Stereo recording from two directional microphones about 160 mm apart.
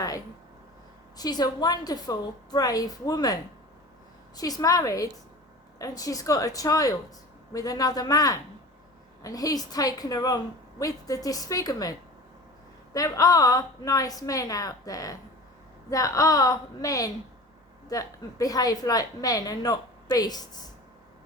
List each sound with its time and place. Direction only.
1.1 s a woman's voice: 25° left (ahead or behind)
4.4 s a woman's voice: 25° left (ahead or behind)